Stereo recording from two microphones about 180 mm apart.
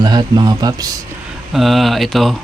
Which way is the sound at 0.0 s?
25° right (ahead or behind).